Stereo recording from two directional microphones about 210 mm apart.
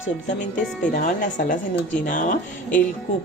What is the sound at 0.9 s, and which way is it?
Speech, 40° left (ahead or behind).